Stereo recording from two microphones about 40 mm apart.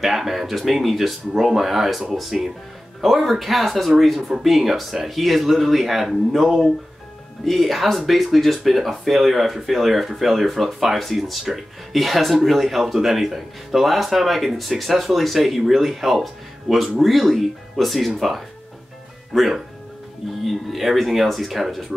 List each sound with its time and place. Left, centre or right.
0.0 s speech: centre